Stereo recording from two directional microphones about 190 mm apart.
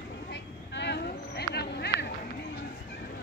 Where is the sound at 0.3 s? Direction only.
65° left (ahead or behind).